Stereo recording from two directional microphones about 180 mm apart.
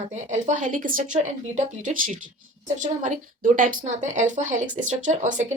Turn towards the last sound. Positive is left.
turn(degrees=-40)  # may be behind; listen again after turning